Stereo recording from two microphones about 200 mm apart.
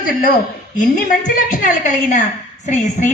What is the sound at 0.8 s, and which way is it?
A woman's voice, 40° left (ahead or behind).